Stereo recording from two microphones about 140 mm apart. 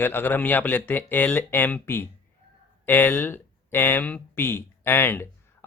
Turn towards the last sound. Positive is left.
turn(degrees=15)  # may be behind; listen again after turning